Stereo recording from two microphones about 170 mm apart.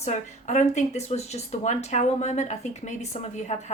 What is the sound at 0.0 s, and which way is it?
Speech, 45° left (ahead or behind).